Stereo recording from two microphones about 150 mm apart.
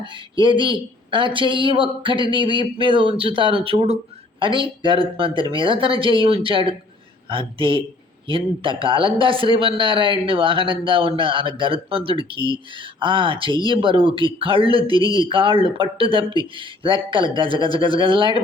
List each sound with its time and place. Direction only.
0.0 s speech: 30° right (ahead or behind)
8.8 s speech: 35° right (ahead or behind)